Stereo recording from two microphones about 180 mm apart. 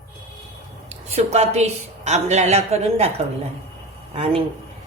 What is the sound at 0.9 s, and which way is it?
A woman's voice, 35° right (ahead or behind).